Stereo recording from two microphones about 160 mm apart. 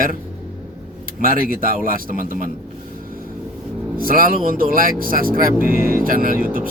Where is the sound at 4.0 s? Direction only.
60° right (ahead or behind).